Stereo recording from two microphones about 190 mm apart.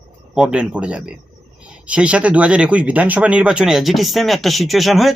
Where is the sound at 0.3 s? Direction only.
5° right (ahead or behind).